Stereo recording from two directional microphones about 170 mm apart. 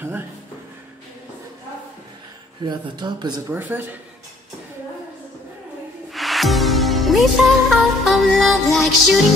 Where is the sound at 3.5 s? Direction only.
10° right (ahead or behind).